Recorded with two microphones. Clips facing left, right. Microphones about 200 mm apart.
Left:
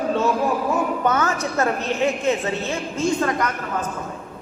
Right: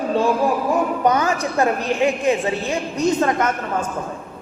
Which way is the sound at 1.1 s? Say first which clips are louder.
Right 3 dB; 15° right (ahead or behind).